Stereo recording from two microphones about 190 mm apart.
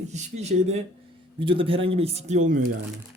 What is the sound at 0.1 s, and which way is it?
Speech, 35° right (ahead or behind).